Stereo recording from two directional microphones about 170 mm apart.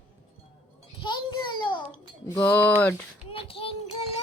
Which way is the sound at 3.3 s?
35° left (ahead or behind).